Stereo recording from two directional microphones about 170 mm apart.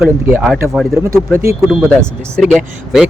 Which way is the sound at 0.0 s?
10° right (ahead or behind).